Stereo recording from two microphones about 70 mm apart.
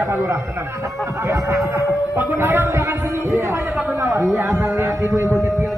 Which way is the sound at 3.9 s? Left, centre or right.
Right.